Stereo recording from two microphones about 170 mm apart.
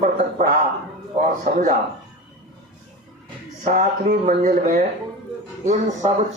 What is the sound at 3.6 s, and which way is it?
Speech, 45° right (ahead or behind).